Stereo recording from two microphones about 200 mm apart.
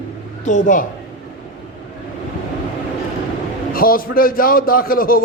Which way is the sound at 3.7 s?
45° left (ahead or behind).